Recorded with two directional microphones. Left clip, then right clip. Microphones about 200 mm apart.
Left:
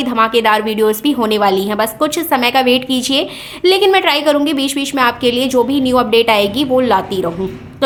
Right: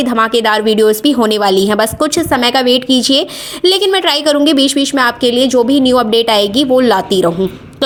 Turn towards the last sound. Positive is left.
turn(degrees=-30)  # may be behind; listen again after turning